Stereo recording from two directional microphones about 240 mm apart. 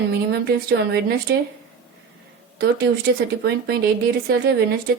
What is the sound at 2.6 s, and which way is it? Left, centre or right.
A woman's voice, right.